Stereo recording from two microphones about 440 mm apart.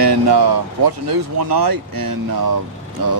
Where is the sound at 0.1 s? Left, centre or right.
Right.